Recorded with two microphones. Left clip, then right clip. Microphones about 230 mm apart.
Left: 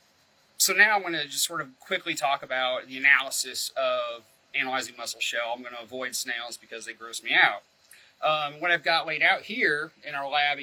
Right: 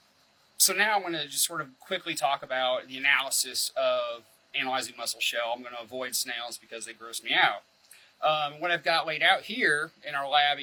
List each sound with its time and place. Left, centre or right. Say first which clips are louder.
0.7 s a man's voice: left 6 dB; centre